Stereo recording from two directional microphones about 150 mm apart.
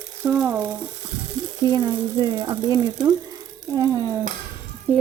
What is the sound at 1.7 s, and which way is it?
Speech, 25° right (ahead or behind).